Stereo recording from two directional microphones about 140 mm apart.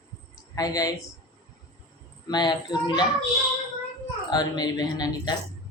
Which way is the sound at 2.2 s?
30° left (ahead or behind).